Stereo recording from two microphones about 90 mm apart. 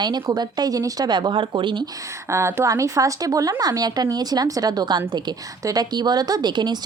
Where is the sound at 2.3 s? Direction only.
35° right (ahead or behind).